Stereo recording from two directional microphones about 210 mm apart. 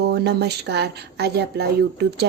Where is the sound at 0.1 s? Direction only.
50° right (ahead or behind).